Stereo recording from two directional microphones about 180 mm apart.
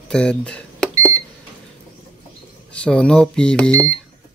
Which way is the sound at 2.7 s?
5° left (ahead or behind).